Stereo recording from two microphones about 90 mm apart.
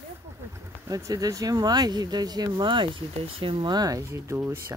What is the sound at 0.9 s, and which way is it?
Speech, 40° right (ahead or behind).